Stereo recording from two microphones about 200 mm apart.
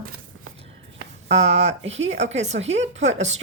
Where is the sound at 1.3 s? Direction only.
35° right (ahead or behind).